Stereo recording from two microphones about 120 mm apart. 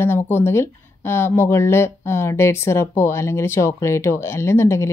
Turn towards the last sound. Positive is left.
turn(degrees=20)  # may be behind; listen again after turning